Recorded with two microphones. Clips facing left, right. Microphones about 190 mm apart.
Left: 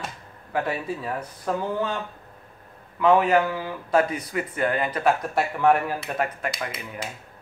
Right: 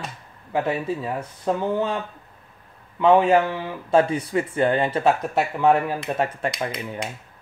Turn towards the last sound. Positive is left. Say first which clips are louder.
# right 4 dB
turn(degrees=5)  # may be behind; listen again after turning